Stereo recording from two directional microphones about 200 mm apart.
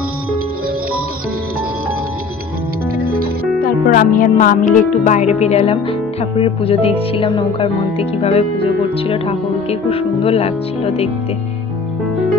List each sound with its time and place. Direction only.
3.6 s speech: 45° left (ahead or behind)